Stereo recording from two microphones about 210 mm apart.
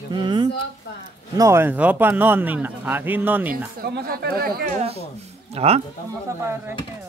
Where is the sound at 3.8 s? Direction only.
50° right (ahead or behind).